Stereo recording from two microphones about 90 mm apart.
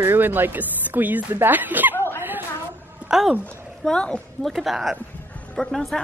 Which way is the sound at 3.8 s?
10° left (ahead or behind).